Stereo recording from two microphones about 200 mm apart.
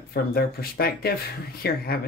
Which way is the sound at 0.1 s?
50° left (ahead or behind).